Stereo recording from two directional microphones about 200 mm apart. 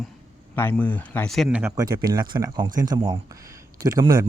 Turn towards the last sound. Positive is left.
turn(degrees=-20)  # may be behind; listen again after turning